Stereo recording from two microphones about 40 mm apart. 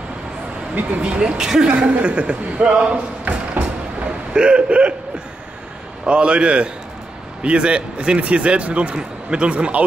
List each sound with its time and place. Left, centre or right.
1.0 s a man's voice: right
1.4 s a woman's voice: centre
1.8 s a man's voice: right
3.3 s vehicle: right
4.3 s a man's voice: right
6.0 s a man's voice: right